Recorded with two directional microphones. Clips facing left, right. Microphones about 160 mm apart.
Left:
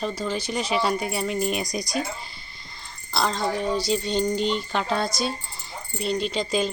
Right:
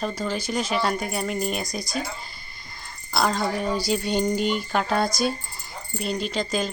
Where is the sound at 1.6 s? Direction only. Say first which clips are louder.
Left 2 dB; 15° left (ahead or behind).